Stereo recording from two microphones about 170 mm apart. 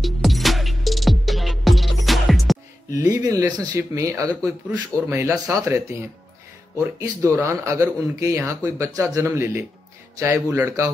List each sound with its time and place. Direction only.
0.0 s music: centre (ahead or behind)
2.9 s speech: 20° right (ahead or behind)